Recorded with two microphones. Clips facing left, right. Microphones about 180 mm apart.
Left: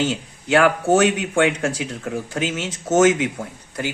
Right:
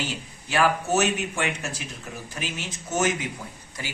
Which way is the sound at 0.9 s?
90° left.